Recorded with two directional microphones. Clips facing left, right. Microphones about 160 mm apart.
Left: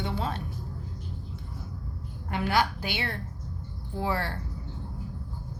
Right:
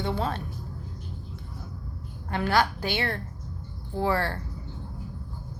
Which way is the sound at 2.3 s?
15° left (ahead or behind).